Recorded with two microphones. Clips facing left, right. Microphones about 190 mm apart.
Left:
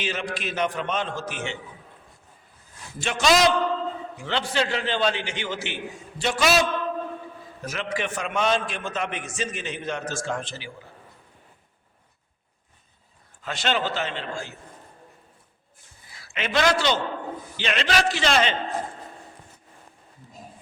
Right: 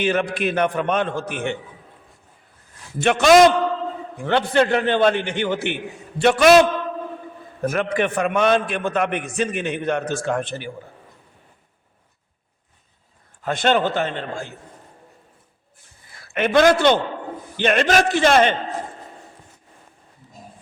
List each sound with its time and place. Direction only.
0.0 s a man's voice: 55° right (ahead or behind)
3.0 s a man's voice: 60° right (ahead or behind)
13.4 s a man's voice: 50° right (ahead or behind)
16.1 s a man's voice: 55° right (ahead or behind)